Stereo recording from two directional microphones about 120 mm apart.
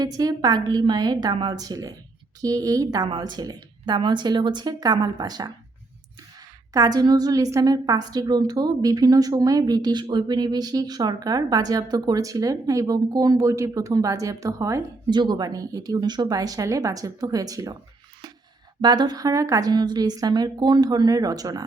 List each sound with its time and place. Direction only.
0.0 s a woman's voice: 35° right (ahead or behind)
6.7 s a woman's voice: 30° right (ahead or behind)
15.0 s a woman's voice: 40° right (ahead or behind)
18.8 s a woman's voice: 35° right (ahead or behind)